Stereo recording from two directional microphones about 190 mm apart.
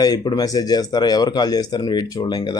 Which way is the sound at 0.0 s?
20° left (ahead or behind).